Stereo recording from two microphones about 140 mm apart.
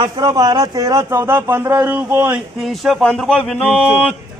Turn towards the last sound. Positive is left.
turn(degrees=5)  # may be behind; listen again after turning